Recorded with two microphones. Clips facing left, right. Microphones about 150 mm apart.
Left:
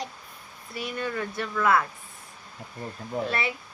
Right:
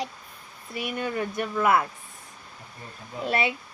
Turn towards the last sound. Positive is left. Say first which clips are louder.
# right 4 dB
turn(degrees=-20)  # may be behind; listen again after turning